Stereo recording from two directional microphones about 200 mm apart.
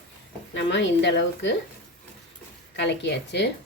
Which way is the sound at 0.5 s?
65° left (ahead or behind).